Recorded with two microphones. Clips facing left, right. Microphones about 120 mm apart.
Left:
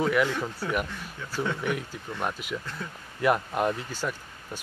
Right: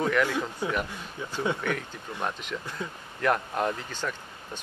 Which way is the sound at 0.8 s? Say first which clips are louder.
Right 1 dB; 15° right (ahead or behind).